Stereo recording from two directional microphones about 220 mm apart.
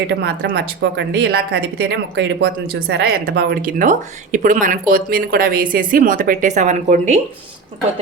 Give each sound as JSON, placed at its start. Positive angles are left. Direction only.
{"t": 0.1, "sound": "speech", "side_deg": -50}